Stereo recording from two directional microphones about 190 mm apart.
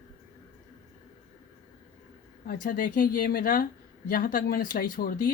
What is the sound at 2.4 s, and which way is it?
Speech, 45° left (ahead or behind).